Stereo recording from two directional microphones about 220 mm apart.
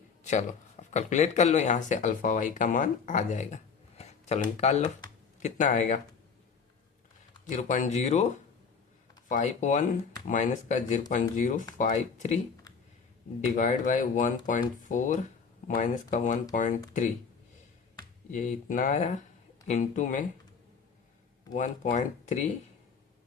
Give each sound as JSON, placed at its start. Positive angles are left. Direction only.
{"t": 0.2, "sound": "speech", "side_deg": 30}
{"t": 7.4, "sound": "speech", "side_deg": 35}
{"t": 9.3, "sound": "speech", "side_deg": 35}
{"t": 13.6, "sound": "speech", "side_deg": 35}
{"t": 18.3, "sound": "speech", "side_deg": 35}
{"t": 21.5, "sound": "speech", "side_deg": 35}